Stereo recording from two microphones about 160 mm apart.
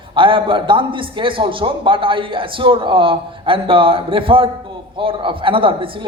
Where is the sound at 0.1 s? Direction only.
30° right (ahead or behind).